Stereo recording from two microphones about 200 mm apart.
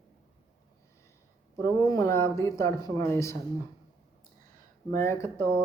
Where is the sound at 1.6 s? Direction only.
15° left (ahead or behind).